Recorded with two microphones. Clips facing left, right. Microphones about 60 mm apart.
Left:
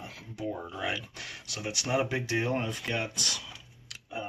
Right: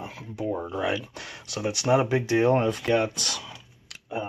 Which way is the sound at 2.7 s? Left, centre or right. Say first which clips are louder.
Right 9 dB; right.